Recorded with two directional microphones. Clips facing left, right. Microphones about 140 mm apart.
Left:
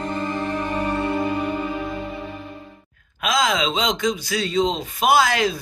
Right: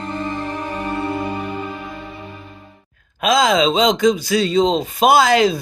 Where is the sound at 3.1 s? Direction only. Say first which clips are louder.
Right 6 dB; 25° right (ahead or behind).